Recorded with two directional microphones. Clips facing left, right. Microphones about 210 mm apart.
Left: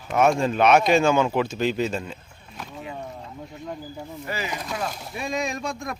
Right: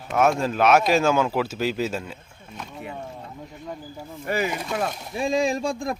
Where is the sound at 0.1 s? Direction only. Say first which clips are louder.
Left 1 dB; centre (ahead or behind).